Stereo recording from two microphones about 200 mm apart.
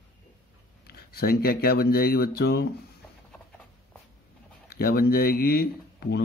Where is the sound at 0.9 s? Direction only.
50° left (ahead or behind).